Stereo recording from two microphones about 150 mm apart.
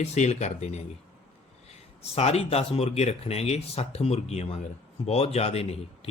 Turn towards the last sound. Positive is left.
turn(degrees=45)  # may be behind; listen again after turning